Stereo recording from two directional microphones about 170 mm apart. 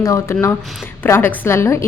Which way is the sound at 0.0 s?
20° left (ahead or behind).